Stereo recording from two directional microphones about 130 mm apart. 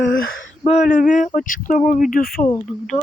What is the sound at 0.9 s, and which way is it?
Speech, 70° left (ahead or behind).